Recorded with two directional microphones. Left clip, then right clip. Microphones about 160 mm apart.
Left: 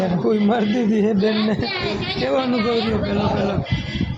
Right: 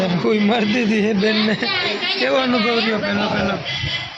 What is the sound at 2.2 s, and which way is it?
Speech, 5° left (ahead or behind).